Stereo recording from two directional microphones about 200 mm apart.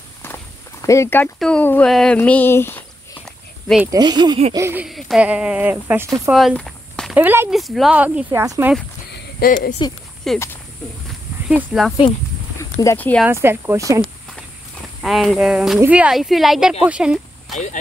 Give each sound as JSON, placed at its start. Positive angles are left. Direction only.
{"t": 0.8, "sound": "speech", "side_deg": 15}
{"t": 2.1, "sound": "a sound", "side_deg": 10}
{"t": 3.8, "sound": "speech", "side_deg": -20}
{"t": 4.6, "sound": "speech", "side_deg": -10}
{"t": 4.8, "sound": "speech", "side_deg": 0}
{"t": 6.3, "sound": "walk", "side_deg": 0}
{"t": 7.2, "sound": "speech", "side_deg": -10}
{"t": 9.1, "sound": "a sound", "side_deg": 45}
{"t": 10.3, "sound": "speech", "side_deg": 0}
{"t": 11.4, "sound": "speech", "side_deg": -5}
{"t": 12.5, "sound": "speech", "side_deg": 15}
{"t": 13.2, "sound": "speech", "side_deg": -10}
{"t": 15.0, "sound": "speech", "side_deg": 0}